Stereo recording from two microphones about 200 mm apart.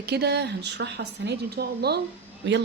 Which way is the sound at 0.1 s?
55° right (ahead or behind).